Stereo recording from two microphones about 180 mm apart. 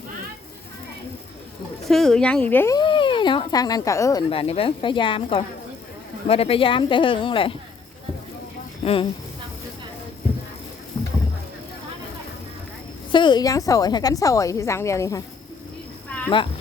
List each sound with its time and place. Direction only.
1.9 s speech: centre (ahead or behind)
2.7 s speech: 25° left (ahead or behind)
4.3 s a woman's voice: 30° left (ahead or behind)
8.8 s a woman's voice: 30° left (ahead or behind)
13.1 s a woman's voice: 25° left (ahead or behind)
16.0 s a sound: 5° left (ahead or behind)